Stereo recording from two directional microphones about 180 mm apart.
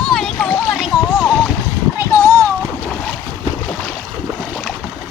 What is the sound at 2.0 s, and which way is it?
Splash, 10° left (ahead or behind).